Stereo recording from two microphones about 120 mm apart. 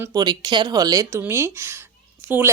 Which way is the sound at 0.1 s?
35° right (ahead or behind).